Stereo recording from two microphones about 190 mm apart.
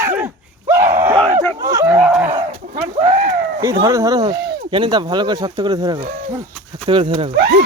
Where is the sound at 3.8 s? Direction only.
15° right (ahead or behind).